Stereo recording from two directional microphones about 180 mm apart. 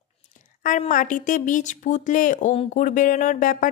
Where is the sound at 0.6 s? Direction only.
45° left (ahead or behind).